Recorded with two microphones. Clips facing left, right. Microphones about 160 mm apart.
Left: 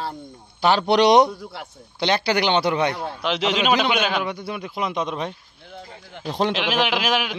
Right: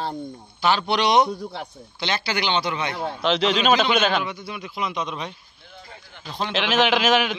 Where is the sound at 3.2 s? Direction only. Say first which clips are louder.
Right 2 dB; 15° left (ahead or behind).